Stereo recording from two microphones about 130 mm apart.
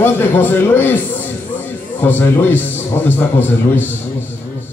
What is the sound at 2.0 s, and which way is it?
A man's voice, 15° left (ahead or behind).